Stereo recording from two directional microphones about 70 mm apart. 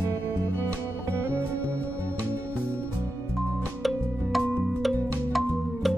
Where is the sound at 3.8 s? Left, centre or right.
Centre.